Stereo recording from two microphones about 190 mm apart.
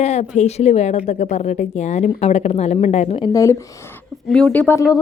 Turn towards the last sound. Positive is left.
turn(degrees=10)  # may be behind; listen again after turning